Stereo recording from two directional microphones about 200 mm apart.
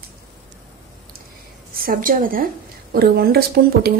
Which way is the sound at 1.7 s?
45° right (ahead or behind).